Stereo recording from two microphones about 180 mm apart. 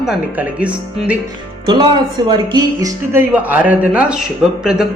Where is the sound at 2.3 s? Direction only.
25° right (ahead or behind).